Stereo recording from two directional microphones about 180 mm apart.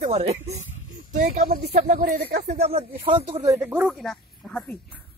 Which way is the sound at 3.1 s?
30° right (ahead or behind).